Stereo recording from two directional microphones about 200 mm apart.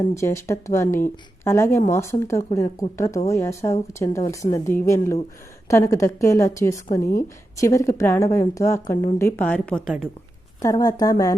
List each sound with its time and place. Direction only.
0.2 s speech: 15° left (ahead or behind)
7.0 s a woman's voice: 45° left (ahead or behind)
7.5 s speech: 15° left (ahead or behind); by 10.1 s centre (ahead or behind)
10.6 s speech: 15° left (ahead or behind)